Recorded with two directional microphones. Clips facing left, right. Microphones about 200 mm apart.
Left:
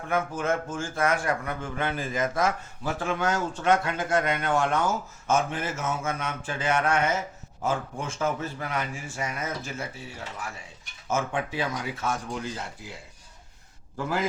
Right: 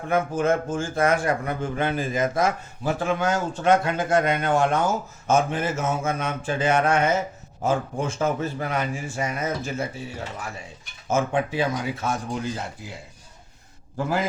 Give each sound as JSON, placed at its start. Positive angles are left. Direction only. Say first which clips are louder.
{"t": 0.1, "sound": "a man's voice", "louder": "right 5 dB", "side_deg": -25}